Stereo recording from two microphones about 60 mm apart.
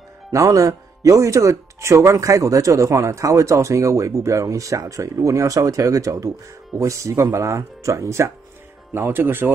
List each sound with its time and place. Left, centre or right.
0.3 s speech: right
8.9 s speech: right